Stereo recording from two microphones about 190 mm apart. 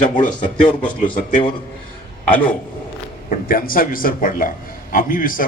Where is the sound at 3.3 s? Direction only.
50° left (ahead or behind).